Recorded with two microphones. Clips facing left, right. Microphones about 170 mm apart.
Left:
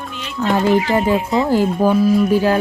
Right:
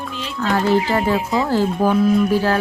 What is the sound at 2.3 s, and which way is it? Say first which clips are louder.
Speech: left 3 dB; 15° left (ahead or behind).